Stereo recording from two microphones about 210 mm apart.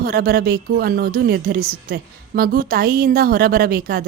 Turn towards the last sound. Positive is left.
turn(degrees=-45)  # may be behind; listen again after turning